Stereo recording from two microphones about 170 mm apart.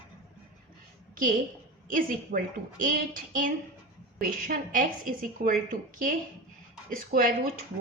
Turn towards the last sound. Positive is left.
turn(degrees=-55)  # may be behind; listen again after turning